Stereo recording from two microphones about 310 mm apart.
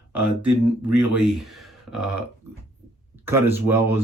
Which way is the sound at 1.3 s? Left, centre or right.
Centre.